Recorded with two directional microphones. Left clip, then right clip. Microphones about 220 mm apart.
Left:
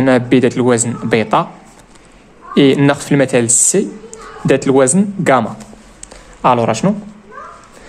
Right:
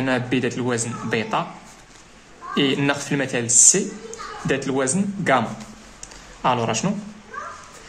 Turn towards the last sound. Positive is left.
turn(degrees=35)  # may be behind; listen again after turning